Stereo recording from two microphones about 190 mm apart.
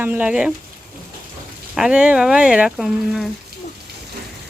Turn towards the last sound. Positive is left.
turn(degrees=0)  # may be behind; listen again after turning